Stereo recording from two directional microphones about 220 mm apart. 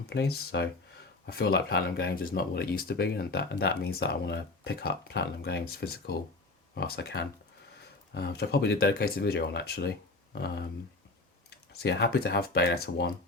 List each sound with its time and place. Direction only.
0.1 s speech: 50° left (ahead or behind)
11.7 s speech: 50° left (ahead or behind)